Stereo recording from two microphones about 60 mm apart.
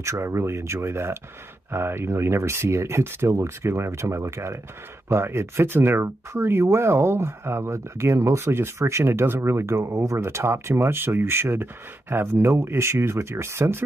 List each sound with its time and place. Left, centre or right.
0.0 s speech: right
10.1 s speech: right